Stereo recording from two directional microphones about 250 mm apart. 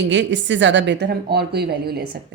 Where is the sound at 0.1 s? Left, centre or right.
Right.